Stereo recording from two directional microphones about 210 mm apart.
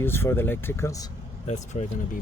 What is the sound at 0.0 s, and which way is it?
Speech, 10° left (ahead or behind).